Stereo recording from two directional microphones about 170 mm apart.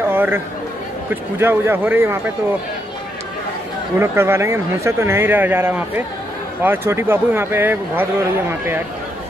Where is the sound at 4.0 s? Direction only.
15° right (ahead or behind).